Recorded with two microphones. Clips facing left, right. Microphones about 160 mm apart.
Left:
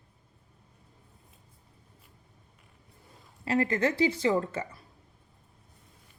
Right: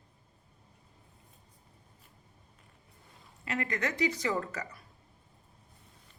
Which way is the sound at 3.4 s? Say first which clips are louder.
Left 7 dB; 30° left (ahead or behind).